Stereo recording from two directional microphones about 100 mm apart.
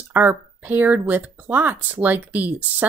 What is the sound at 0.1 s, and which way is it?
Speech, 15° right (ahead or behind).